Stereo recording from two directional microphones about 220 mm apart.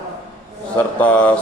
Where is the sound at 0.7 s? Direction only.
5° left (ahead or behind).